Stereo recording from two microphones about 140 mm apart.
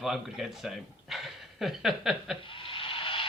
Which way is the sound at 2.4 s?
40° left (ahead or behind).